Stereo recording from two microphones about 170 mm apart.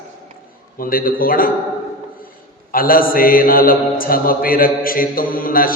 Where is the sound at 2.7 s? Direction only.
55° left (ahead or behind).